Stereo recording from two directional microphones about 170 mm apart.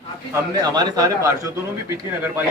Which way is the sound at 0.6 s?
25° right (ahead or behind).